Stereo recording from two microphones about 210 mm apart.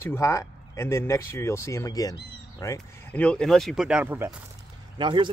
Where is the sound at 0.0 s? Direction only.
15° left (ahead or behind); by 4.3 s 10° right (ahead or behind).